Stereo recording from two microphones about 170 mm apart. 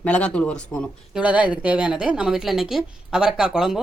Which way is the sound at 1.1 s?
10° right (ahead or behind).